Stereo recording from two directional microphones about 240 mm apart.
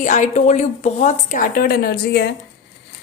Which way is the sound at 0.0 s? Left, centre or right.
Left.